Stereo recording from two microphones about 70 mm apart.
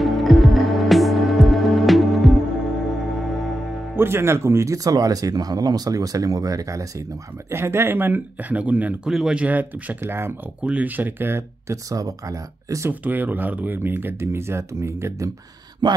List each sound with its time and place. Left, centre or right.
0.0 s music: centre
3.9 s speech: right
4.8 s speech: right
7.5 s speech: right; by 9.1 s centre
9.1 s speech: centre
9.4 s speech: right
10.6 s speech: centre
11.0 s speech: right
11.7 s speech: right
13.0 s speech: right
15.8 s speech: right